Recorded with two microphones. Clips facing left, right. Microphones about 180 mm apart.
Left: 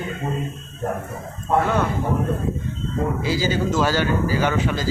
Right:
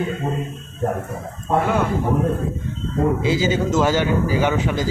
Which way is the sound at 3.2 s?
20° right (ahead or behind).